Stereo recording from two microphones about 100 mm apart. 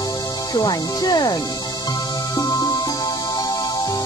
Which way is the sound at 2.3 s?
40° left (ahead or behind).